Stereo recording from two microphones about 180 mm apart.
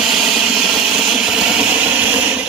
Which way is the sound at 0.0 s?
Centre (ahead or behind).